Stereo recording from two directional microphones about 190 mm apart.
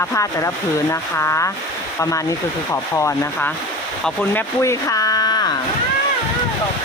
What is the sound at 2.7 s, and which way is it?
Speech, 15° left (ahead or behind).